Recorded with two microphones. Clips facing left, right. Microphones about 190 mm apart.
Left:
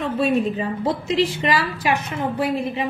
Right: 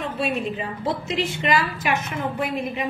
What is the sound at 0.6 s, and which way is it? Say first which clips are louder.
A woman's voice: left 4 dB; 35° left (ahead or behind).